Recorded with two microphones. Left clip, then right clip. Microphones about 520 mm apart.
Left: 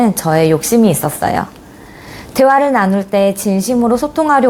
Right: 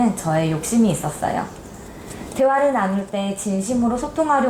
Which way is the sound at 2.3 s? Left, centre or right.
Left.